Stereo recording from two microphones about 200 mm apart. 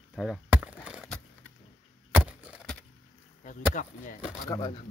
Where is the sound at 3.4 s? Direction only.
40° left (ahead or behind).